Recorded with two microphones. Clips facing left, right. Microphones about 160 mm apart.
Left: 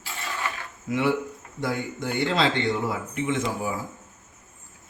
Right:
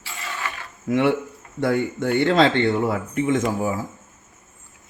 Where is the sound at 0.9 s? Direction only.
55° right (ahead or behind).